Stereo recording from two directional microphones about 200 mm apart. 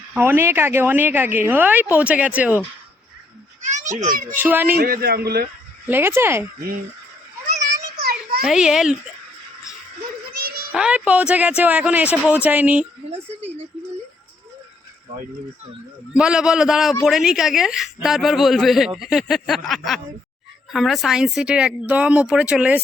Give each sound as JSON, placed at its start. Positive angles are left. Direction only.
{"t": 0.1, "sound": "a woman's voice", "side_deg": -10}
{"t": 3.6, "sound": "children playing", "side_deg": -35}
{"t": 4.4, "sound": "a woman's voice", "side_deg": -10}
{"t": 4.8, "sound": "a man's voice", "side_deg": -50}
{"t": 5.9, "sound": "a woman's voice", "side_deg": -10}
{"t": 7.9, "sound": "children playing", "side_deg": -50}
{"t": 8.4, "sound": "a man's voice", "side_deg": -5}
{"t": 10.3, "sound": "a sound", "side_deg": -50}
{"t": 10.7, "sound": "a woman's voice", "side_deg": -5}
{"t": 13.1, "sound": "speech", "side_deg": -30}
{"t": 16.1, "sound": "a man's voice", "side_deg": -5}